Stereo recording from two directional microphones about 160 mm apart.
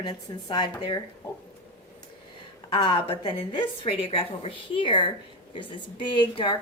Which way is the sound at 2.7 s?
35° left (ahead or behind).